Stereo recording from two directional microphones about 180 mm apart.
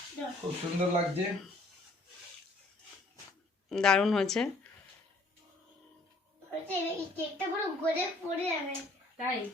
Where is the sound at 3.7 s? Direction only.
5° left (ahead or behind).